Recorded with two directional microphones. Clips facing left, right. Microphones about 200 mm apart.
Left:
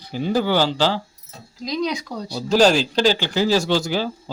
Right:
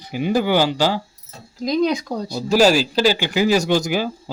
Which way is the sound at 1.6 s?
50° right (ahead or behind).